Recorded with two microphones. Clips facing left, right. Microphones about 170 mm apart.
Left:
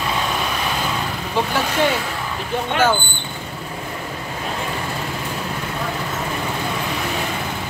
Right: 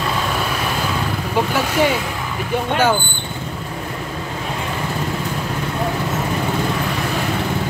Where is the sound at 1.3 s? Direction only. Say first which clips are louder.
Right 2 dB; 10° right (ahead or behind).